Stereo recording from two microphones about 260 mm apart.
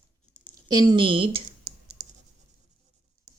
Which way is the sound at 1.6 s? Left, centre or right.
Right.